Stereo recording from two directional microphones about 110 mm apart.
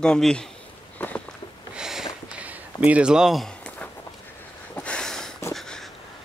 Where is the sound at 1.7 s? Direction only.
5° right (ahead or behind).